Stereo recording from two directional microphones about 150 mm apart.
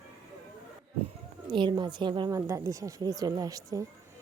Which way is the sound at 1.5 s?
30° right (ahead or behind).